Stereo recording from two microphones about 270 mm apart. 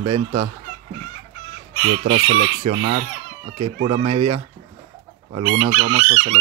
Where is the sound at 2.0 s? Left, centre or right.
Right.